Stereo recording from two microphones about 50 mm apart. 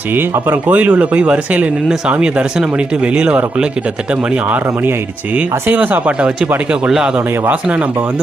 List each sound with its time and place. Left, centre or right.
0.4 s speech: right; by 3.7 s centre
4.4 s a man's voice: right
6.1 s speech: right